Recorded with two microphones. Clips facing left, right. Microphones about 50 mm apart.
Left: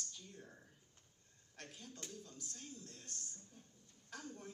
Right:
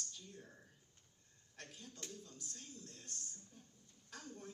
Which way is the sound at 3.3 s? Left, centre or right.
Left.